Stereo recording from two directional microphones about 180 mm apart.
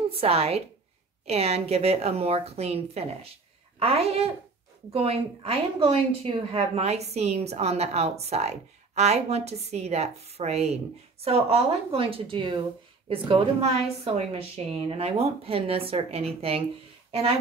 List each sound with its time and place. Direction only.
0.1 s a woman's voice: 35° right (ahead or behind)